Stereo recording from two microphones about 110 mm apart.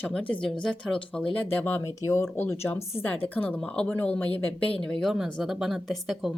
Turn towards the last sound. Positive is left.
turn(degrees=0)  # may be behind; listen again after turning